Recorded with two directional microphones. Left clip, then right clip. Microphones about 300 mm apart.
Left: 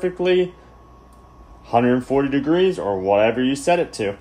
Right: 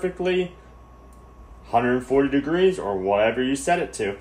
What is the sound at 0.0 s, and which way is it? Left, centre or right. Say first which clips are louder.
Speech: left 5 dB; left.